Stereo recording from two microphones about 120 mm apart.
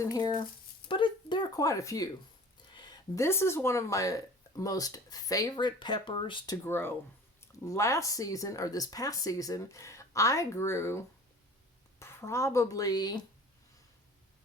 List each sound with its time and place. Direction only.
0.0 s speech: 30° left (ahead or behind)
0.9 s a sound: 45° left (ahead or behind)
3.2 s speech: 20° left (ahead or behind); by 6.6 s 35° left (ahead or behind)
6.7 s speech: 20° left (ahead or behind); by 13.2 s 35° left (ahead or behind)